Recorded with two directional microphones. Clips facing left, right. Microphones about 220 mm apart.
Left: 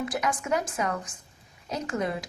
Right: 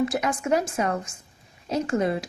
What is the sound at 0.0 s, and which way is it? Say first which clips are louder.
A woman's voice: right 5 dB; 30° right (ahead or behind).